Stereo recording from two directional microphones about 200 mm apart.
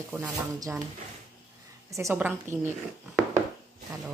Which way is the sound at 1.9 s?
15° right (ahead or behind).